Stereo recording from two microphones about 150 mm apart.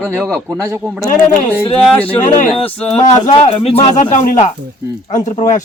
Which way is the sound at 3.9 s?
55° left (ahead or behind).